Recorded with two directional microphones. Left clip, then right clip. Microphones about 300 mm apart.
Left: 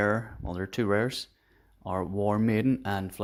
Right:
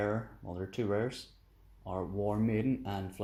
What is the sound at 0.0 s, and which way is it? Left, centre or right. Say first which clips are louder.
Speech: left 7 dB; left.